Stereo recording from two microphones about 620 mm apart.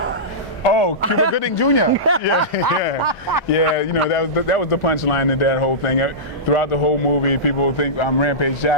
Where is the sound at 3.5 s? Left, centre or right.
Left.